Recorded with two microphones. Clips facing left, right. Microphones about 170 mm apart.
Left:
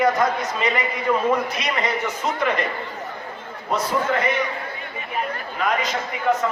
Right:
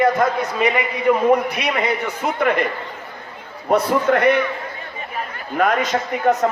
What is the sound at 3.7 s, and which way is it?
Speech, 60° right (ahead or behind).